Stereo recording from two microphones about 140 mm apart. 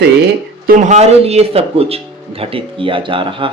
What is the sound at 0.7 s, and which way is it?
A man's voice, 55° right (ahead or behind).